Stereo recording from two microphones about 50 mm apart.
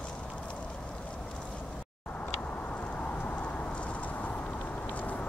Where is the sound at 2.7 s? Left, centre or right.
Left.